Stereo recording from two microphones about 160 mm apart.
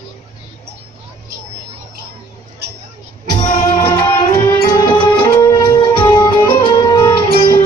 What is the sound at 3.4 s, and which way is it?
Music, 50° left (ahead or behind).